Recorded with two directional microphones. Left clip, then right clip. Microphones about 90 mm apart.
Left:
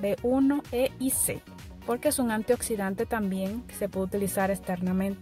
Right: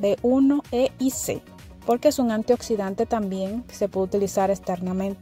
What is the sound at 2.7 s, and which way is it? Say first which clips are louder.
Speech: right 5 dB; 25° right (ahead or behind).